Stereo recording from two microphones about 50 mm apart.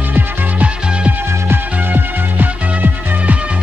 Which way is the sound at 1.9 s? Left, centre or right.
Right.